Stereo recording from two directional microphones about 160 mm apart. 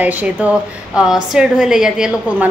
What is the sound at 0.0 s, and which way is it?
A woman's voice, 10° right (ahead or behind).